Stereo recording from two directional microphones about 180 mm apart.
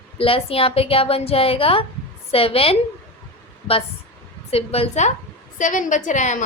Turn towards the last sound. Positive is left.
turn(degrees=40)  # may be behind; listen again after turning